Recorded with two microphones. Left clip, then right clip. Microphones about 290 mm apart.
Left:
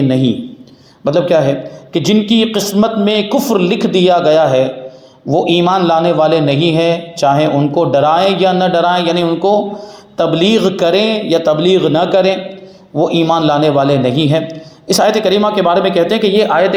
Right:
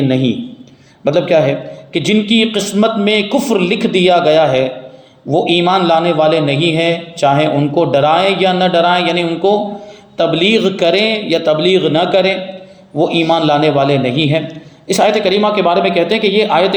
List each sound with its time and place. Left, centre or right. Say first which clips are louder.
0.1 s a man's voice: left 1 dB; centre